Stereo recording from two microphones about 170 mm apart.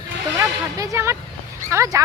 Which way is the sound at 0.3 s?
15° right (ahead or behind).